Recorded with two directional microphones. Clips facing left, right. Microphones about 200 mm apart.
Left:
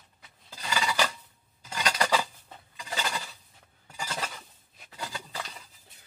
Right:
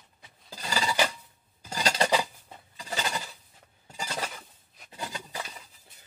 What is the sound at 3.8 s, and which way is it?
Cutlery, 25° right (ahead or behind).